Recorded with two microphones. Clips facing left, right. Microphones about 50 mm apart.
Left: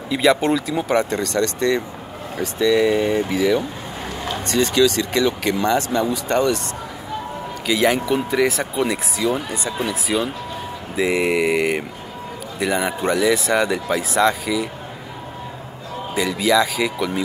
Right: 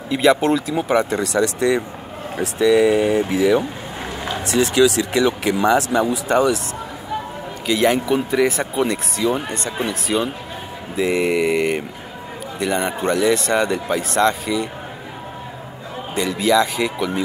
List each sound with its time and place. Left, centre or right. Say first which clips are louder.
0.1 s speech: right 1 dB; centre
7.6 s speech: right 1 dB; centre
16.2 s speech: right 1 dB; centre